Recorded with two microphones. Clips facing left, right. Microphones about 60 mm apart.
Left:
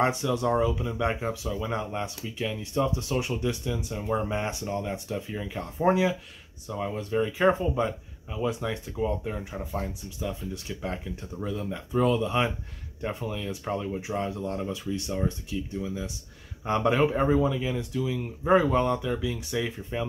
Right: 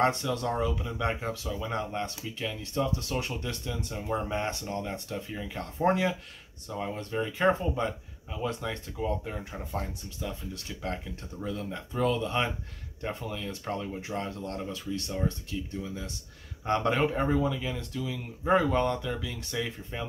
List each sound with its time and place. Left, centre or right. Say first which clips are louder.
0.0 s speech: left 2 dB; centre
6.7 s speech: left 3 dB; centre
7.0 s speech: left 4 dB; centre